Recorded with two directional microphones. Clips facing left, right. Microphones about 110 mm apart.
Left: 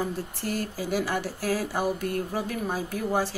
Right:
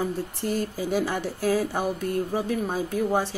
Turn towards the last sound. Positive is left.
turn(degrees=-20)  # may be behind; listen again after turning